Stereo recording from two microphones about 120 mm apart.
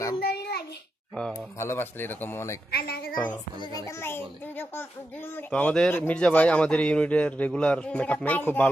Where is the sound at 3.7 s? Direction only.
25° left (ahead or behind).